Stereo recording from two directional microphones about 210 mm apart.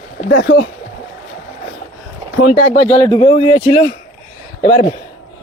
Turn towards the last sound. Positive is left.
turn(degrees=40)  # may be behind; listen again after turning